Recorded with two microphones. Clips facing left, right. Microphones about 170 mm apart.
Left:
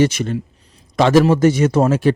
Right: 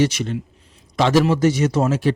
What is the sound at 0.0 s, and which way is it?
A man's voice, 50° left (ahead or behind).